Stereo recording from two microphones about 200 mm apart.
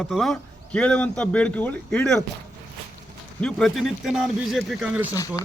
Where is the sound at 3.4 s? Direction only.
Centre (ahead or behind).